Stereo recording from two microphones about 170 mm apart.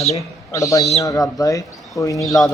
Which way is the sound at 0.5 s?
20° left (ahead or behind).